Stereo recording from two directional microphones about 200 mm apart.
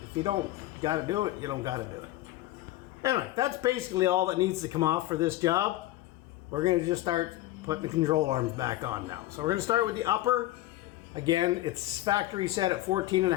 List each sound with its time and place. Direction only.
0.8 s speech: 20° right (ahead or behind)
3.0 s speech: 15° right (ahead or behind)